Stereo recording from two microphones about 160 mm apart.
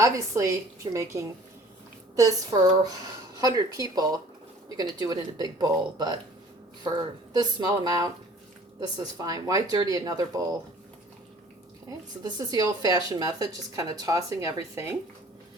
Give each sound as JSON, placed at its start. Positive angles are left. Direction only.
{"t": 0.0, "sound": "speech", "side_deg": -20}
{"t": 7.3, "sound": "speech", "side_deg": -25}
{"t": 11.9, "sound": "speech", "side_deg": -25}